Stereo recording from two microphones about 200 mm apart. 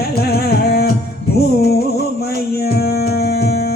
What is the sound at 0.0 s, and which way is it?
Carnatic music, 50° left (ahead or behind).